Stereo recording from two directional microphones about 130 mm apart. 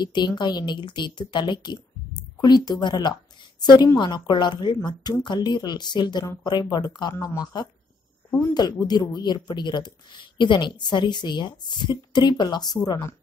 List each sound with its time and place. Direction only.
0.0 s speech: 35° left (ahead or behind)
8.3 s speech: 20° left (ahead or behind)
8.5 s speech: 30° left (ahead or behind)